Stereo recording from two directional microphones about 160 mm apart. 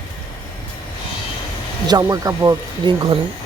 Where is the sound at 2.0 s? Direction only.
20° right (ahead or behind).